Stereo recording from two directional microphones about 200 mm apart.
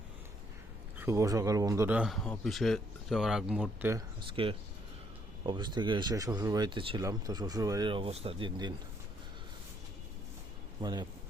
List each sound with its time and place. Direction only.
0.9 s speech: 15° right (ahead or behind)
4.3 s speech: 25° right (ahead or behind)
10.8 s speech: 20° right (ahead or behind)